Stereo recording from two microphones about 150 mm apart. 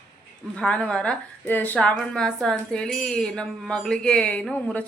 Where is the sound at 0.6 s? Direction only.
5° left (ahead or behind).